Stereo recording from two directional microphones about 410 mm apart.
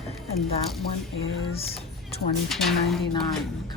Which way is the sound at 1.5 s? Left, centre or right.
Centre.